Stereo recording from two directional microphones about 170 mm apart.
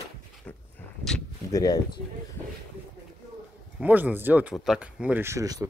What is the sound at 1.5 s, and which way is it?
Speech, 20° left (ahead or behind).